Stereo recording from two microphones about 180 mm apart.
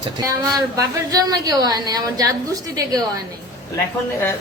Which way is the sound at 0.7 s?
20° right (ahead or behind).